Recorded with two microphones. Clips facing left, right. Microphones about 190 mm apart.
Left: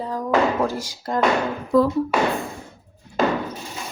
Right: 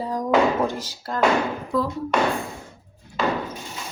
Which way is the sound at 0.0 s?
15° right (ahead or behind).